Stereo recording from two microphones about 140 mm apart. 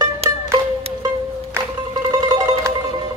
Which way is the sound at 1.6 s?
20° right (ahead or behind).